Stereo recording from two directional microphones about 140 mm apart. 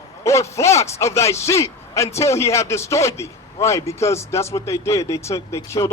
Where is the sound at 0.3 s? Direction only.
20° left (ahead or behind).